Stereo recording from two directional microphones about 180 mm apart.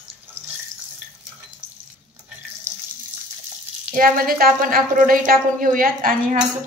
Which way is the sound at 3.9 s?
50° right (ahead or behind).